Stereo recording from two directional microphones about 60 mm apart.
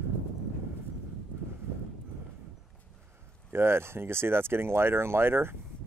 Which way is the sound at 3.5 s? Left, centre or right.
Right.